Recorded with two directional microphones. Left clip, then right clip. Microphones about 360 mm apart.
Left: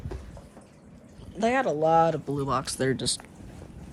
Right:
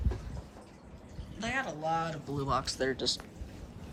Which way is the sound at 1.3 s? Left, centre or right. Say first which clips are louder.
Left 11 dB; centre.